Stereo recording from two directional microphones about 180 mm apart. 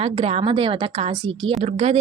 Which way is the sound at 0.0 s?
35° right (ahead or behind).